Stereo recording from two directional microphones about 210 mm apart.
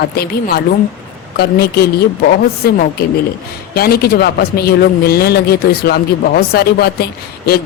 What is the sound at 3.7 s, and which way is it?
A man's voice, 45° left (ahead or behind).